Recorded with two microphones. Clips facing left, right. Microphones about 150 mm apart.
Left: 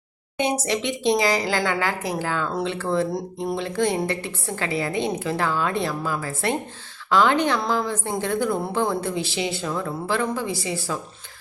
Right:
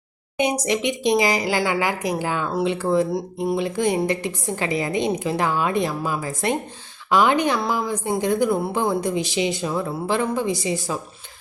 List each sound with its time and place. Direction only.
0.3 s a woman's voice: 15° right (ahead or behind)
3.1 s a woman's voice: centre (ahead or behind); by 10.9 s 20° right (ahead or behind)